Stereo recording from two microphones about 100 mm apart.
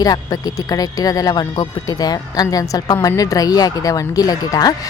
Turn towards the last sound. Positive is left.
turn(degrees=40)  # may be behind; listen again after turning